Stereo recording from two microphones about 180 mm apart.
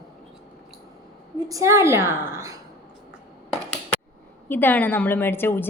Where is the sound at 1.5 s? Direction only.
15° right (ahead or behind).